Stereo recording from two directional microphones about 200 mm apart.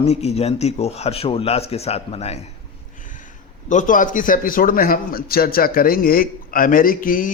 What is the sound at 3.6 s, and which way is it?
A man's voice, 40° left (ahead or behind).